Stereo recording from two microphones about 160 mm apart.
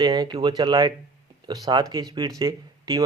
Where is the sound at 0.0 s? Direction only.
30° right (ahead or behind).